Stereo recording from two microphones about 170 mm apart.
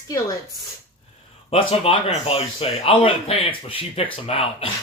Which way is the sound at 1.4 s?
35° left (ahead or behind).